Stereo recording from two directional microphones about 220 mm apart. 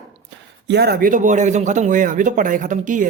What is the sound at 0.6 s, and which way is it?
Speech, 50° right (ahead or behind).